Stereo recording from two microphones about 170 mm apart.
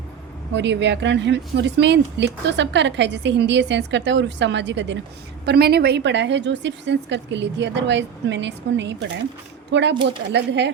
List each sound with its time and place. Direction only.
0.5 s speech: 90° right
5.5 s speech: 70° right (ahead or behind); by 10.7 s 90° right